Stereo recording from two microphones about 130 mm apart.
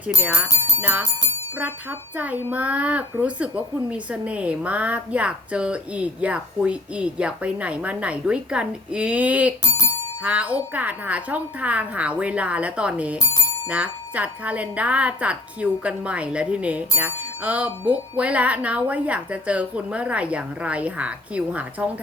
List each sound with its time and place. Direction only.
0.2 s speech: 15° right (ahead or behind)
2.1 s speech: 10° right (ahead or behind)